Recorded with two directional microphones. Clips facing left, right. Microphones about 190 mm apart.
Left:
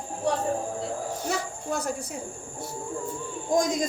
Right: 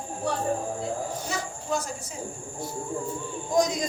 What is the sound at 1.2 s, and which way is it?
Snake, 60° left (ahead or behind).